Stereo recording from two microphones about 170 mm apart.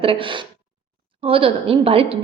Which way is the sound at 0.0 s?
30° right (ahead or behind).